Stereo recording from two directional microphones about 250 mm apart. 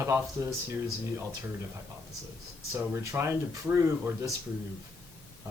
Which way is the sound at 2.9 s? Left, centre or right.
Centre.